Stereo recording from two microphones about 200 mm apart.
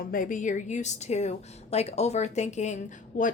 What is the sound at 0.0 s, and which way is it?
A woman's voice, 45° left (ahead or behind).